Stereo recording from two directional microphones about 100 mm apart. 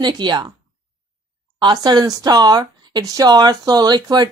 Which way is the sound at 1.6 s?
45° right (ahead or behind).